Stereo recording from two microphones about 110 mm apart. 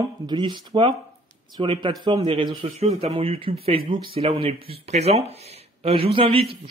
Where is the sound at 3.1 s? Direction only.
55° right (ahead or behind).